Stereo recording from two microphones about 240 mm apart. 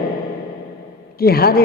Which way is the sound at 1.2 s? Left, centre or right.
Left.